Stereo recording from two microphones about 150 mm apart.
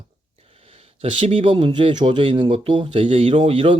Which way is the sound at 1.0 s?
40° right (ahead or behind).